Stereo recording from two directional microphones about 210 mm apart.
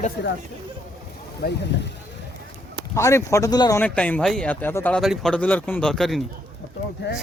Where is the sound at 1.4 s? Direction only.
45° left (ahead or behind).